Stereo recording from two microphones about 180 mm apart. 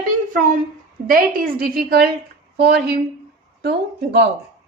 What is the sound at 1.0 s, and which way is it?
A woman's voice, 55° right (ahead or behind).